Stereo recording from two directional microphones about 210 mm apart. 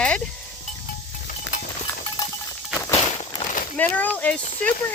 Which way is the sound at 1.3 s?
35° left (ahead or behind).